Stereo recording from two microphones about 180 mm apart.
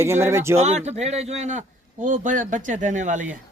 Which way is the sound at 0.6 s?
40° right (ahead or behind).